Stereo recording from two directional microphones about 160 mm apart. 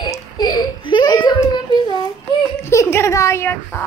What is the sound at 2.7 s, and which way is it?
Speech, 15° left (ahead or behind).